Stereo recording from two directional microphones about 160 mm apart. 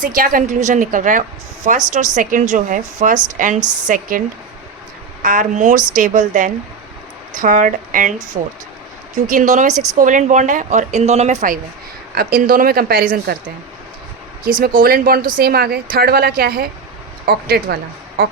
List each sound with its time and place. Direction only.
0.0 s a woman's voice: 60° right (ahead or behind)
5.2 s a woman's voice: 55° right (ahead or behind)
12.1 s a woman's voice: 70° right (ahead or behind)
14.6 s a woman's voice: 65° right (ahead or behind)